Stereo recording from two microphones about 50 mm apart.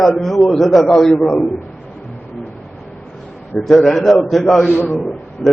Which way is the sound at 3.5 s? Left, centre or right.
Centre.